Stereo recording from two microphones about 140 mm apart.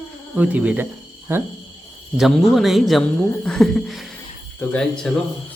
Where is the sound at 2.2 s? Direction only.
Centre (ahead or behind).